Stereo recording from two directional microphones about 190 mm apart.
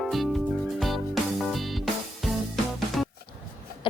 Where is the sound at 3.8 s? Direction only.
25° left (ahead or behind).